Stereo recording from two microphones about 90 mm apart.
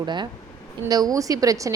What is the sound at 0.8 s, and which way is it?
Speech, 45° right (ahead or behind).